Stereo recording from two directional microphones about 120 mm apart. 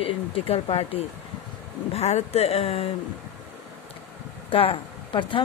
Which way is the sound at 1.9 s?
65° left (ahead or behind).